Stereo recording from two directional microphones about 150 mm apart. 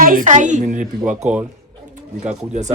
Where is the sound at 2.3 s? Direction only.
50° right (ahead or behind).